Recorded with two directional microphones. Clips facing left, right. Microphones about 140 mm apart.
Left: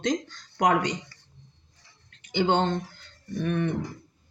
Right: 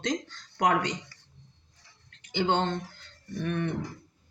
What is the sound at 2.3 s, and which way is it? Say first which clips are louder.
Speech: left 3 dB; 15° left (ahead or behind).